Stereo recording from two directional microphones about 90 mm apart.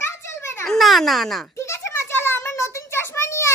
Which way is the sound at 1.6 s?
30° left (ahead or behind).